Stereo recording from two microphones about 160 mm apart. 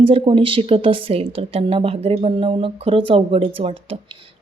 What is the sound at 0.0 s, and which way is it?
A woman's voice, 35° right (ahead or behind).